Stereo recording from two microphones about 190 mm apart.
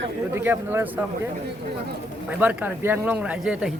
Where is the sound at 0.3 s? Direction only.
10° right (ahead or behind).